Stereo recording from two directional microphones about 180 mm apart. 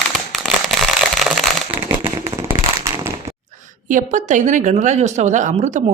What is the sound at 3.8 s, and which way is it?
A woman's voice, 45° right (ahead or behind).